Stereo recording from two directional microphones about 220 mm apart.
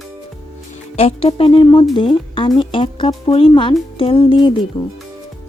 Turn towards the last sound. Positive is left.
turn(degrees=20)  # may be behind; listen again after turning